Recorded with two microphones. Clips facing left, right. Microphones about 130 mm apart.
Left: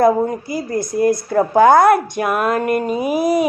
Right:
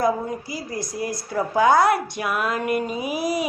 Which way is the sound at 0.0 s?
55° left (ahead or behind).